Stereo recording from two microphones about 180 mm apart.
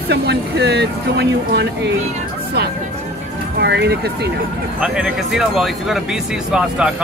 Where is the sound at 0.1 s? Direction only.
65° right (ahead or behind).